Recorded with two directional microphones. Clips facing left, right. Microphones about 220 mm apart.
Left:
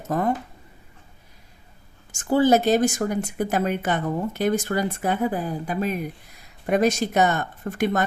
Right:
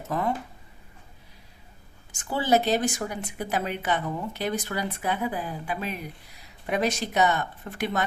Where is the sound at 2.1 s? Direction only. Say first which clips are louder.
Left 6 dB; 45° left (ahead or behind).